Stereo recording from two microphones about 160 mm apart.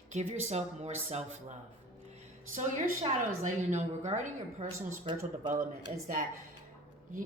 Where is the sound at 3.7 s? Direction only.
45° right (ahead or behind).